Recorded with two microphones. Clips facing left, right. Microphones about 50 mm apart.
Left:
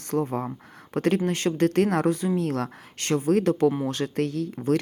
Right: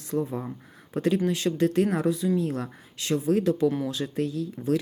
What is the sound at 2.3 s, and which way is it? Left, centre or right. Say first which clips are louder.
Speech: left 2 dB; left.